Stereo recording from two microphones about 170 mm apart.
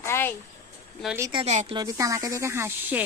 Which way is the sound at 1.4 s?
40° right (ahead or behind).